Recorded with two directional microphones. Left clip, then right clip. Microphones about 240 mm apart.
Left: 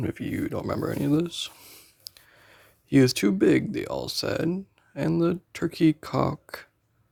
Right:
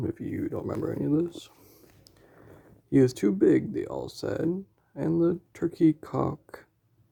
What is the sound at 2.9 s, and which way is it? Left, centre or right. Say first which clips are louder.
Speech: left 2 dB; left.